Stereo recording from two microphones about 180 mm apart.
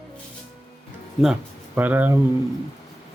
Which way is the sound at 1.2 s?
5° right (ahead or behind).